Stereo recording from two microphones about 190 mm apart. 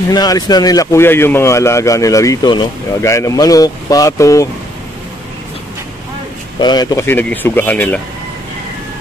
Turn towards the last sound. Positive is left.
turn(degrees=10)  # may be behind; listen again after turning